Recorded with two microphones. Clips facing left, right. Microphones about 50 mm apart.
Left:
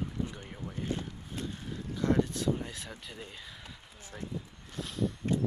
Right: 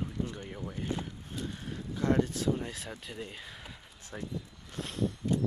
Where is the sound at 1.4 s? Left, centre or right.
Right.